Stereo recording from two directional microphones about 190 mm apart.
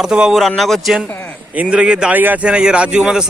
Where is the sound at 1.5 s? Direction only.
5° right (ahead or behind).